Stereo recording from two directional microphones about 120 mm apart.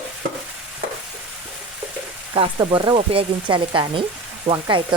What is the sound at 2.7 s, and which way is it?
Speech, 45° right (ahead or behind).